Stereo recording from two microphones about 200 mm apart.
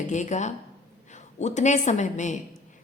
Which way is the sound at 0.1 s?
35° left (ahead or behind).